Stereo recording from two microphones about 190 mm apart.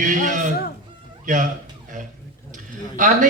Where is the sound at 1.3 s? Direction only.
45° right (ahead or behind).